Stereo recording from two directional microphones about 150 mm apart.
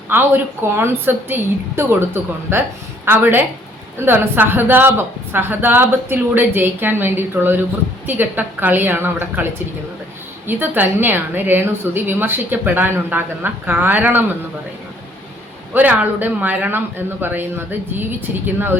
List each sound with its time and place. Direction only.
0.1 s a woman's voice: 15° right (ahead or behind)
15.7 s a woman's voice: 10° right (ahead or behind)